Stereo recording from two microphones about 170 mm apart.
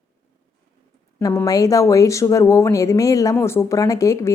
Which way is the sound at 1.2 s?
20° left (ahead or behind).